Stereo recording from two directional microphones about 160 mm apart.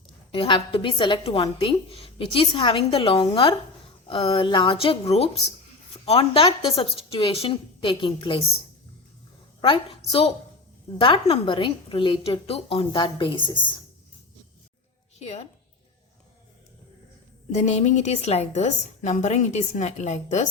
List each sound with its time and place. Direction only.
0.3 s a woman's voice: 30° left (ahead or behind)
9.6 s a woman's voice: 30° left (ahead or behind)
15.2 s a woman's voice: 40° left (ahead or behind)
17.5 s a woman's voice: 45° left (ahead or behind)